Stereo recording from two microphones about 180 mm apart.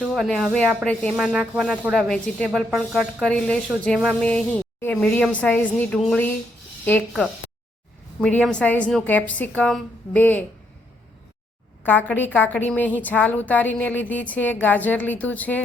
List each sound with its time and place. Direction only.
0.0 s speech: centre (ahead or behind)
8.2 s a woman's voice: 5° left (ahead or behind)
11.8 s a woman's voice: 10° left (ahead or behind)